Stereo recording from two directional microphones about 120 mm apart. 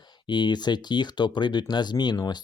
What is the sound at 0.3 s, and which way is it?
Speech, 40° left (ahead or behind).